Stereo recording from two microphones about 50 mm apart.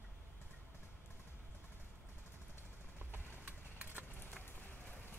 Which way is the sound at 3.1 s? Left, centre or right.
Right.